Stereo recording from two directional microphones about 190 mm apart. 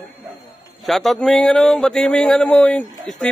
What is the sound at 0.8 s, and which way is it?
A man's voice, centre (ahead or behind).